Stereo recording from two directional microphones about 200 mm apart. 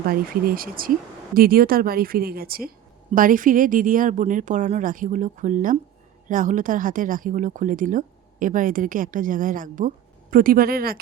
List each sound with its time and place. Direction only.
0.1 s speech: 45° right (ahead or behind)